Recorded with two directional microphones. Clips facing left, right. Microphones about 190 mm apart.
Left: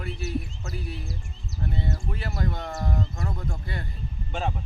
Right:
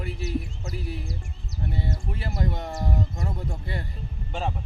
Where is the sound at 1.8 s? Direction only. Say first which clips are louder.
Even; 30° right (ahead or behind).